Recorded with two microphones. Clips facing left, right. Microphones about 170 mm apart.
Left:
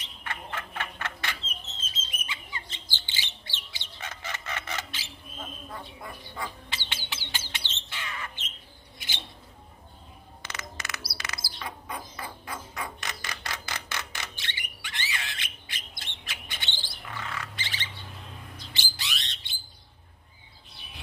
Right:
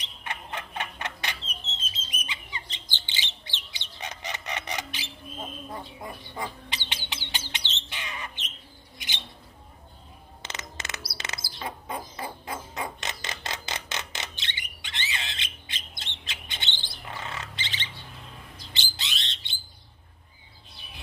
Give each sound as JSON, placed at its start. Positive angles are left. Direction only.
{"t": 0.0, "sound": "a sound", "side_deg": -20}
{"t": 2.0, "sound": "bird", "side_deg": -20}
{"t": 10.4, "sound": "bird", "side_deg": -20}